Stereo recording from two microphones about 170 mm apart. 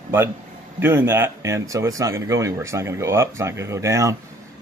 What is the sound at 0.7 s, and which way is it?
Speech, 15° right (ahead or behind).